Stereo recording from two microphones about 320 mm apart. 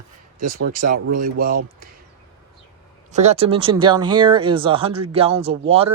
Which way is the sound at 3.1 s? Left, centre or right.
Right.